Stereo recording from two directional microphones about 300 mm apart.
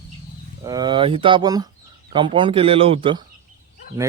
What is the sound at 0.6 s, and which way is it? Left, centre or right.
Speech, centre.